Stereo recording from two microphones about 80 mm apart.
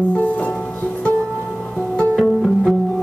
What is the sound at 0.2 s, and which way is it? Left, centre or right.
Music, centre.